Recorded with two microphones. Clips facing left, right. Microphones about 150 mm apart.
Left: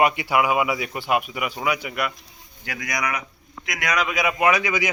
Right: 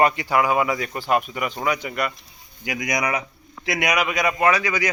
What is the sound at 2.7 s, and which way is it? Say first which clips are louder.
Speech: right 4 dB; 20° right (ahead or behind).